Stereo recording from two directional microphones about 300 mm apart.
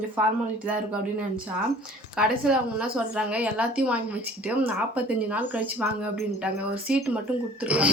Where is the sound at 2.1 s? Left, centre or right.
Centre.